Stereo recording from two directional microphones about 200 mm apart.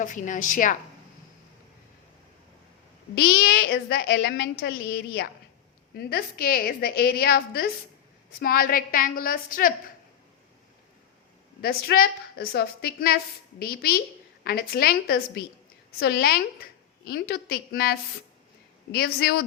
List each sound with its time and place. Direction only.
0.0 s a woman's voice: 40° left (ahead or behind)
3.4 s a woman's voice: 55° left (ahead or behind)
11.6 s a woman's voice: 50° left (ahead or behind)